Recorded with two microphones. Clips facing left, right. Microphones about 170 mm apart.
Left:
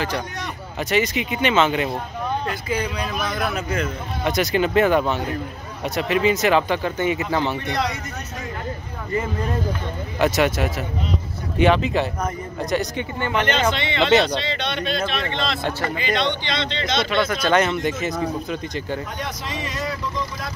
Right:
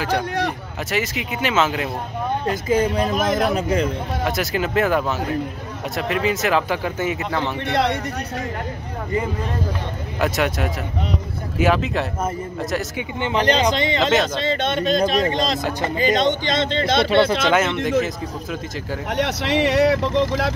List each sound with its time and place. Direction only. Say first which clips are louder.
0.8 s speech: left 3 dB; centre (ahead or behind)
2.4 s speech: right 6 dB; 45° right (ahead or behind)
3.5 s speech: right 5 dB; 35° right (ahead or behind)
4.2 s speech: left 4 dB; centre (ahead or behind)
7.6 s speech: right 4 dB; 60° right (ahead or behind)
10.2 s speech: left 2 dB; centre (ahead or behind)
13.4 s speech: right 4 dB; 35° right (ahead or behind)
17.1 s speech: right 6 dB; 30° right (ahead or behind)
17.5 s speech: even; centre (ahead or behind)
19.1 s speech: right 9 dB; 75° right (ahead or behind)